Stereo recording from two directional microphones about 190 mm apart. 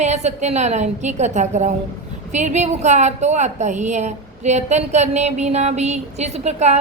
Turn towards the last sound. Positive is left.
turn(degrees=-35)  # may be behind; listen again after turning